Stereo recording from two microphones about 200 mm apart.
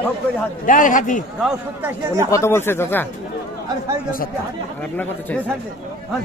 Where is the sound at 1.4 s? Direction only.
10° right (ahead or behind).